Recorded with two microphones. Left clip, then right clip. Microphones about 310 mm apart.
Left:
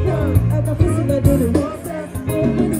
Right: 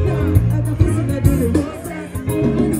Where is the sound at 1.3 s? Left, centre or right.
Centre.